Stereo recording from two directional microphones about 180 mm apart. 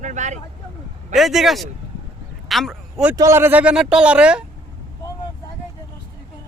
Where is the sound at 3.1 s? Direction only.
15° right (ahead or behind).